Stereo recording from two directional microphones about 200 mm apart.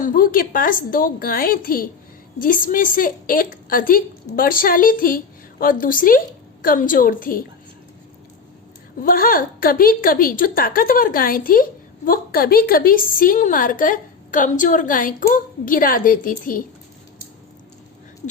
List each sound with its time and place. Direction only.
0.0 s a woman's voice: 45° left (ahead or behind)
9.0 s a woman's voice: 45° left (ahead or behind)